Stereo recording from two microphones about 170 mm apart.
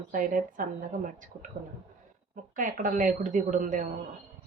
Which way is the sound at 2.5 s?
50° right (ahead or behind).